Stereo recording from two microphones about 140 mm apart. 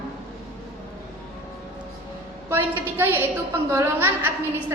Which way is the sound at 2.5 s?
15° right (ahead or behind).